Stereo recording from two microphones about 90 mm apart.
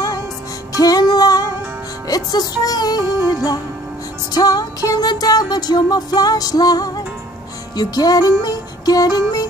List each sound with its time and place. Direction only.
0.7 s music: 45° left (ahead or behind)